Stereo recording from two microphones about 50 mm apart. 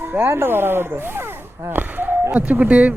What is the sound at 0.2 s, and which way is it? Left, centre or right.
Speech, right.